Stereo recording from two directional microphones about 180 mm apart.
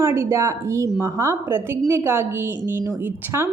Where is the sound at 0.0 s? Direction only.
15° right (ahead or behind).